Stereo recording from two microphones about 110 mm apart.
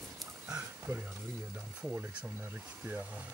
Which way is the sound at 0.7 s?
20° right (ahead or behind).